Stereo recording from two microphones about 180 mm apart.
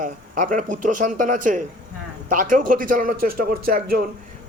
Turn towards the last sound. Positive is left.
turn(degrees=-55)  # may be behind; listen again after turning